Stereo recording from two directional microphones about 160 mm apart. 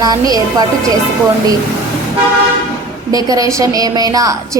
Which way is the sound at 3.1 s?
20° right (ahead or behind).